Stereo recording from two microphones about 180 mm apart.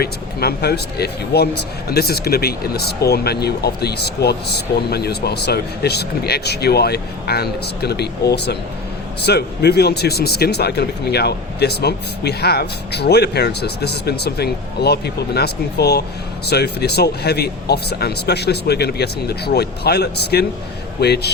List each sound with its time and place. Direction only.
0.0 s speech: 60° left (ahead or behind)